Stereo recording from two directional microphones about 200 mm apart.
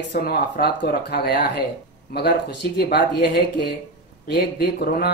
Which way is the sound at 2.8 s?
55° left (ahead or behind).